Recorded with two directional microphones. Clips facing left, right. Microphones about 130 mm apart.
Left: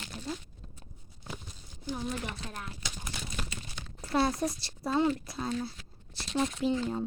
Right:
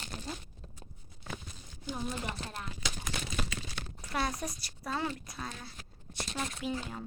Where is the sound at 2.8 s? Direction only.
90° right.